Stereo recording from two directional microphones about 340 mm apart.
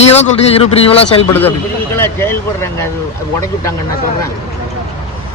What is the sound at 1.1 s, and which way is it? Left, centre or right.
A man's voice, centre.